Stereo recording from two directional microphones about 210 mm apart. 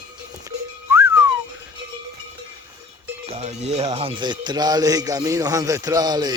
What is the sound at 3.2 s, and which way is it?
Music, 30° right (ahead or behind).